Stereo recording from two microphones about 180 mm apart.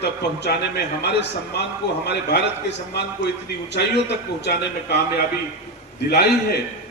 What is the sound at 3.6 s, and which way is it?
A man's voice, 70° left (ahead or behind).